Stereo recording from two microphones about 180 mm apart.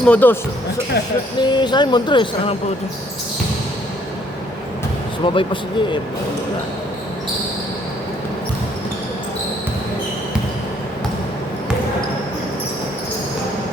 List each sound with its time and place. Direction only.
0.0 s speech: 10° left (ahead or behind)
1.4 s speech: 25° left (ahead or behind)
5.2 s speech: 30° left (ahead or behind)